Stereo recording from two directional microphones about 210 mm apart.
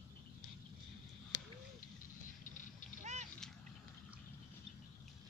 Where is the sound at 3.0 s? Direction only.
35° right (ahead or behind).